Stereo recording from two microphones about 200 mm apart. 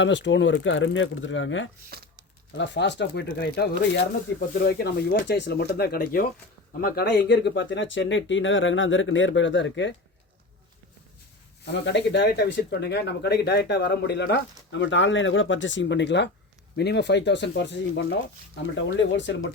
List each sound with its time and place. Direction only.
0.0 s speech: 65° left (ahead or behind)
2.6 s speech: 60° left (ahead or behind)
11.6 s speech: 60° left (ahead or behind)